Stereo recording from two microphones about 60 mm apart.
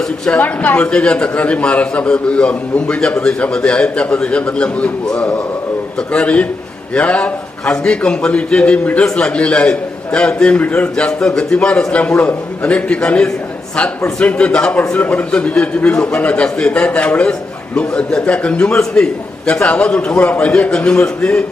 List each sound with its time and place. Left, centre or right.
0.3 s a man's voice: left
0.8 s a man's voice: centre
10.9 s a man's voice: centre